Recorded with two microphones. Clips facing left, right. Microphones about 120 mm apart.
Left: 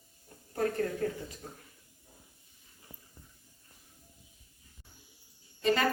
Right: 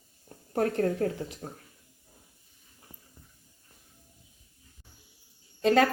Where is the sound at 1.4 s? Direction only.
50° right (ahead or behind).